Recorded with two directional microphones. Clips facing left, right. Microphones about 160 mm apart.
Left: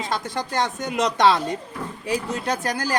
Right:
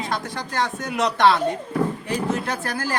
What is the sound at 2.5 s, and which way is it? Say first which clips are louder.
Speech: left 2 dB; 20° left (ahead or behind).